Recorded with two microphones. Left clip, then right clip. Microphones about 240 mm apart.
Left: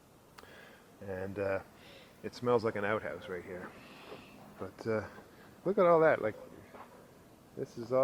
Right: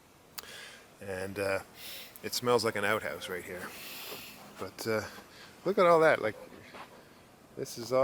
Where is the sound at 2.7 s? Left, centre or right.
Centre.